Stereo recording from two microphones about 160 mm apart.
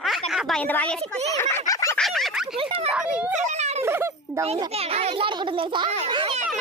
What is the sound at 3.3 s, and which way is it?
Speech, 45° right (ahead or behind).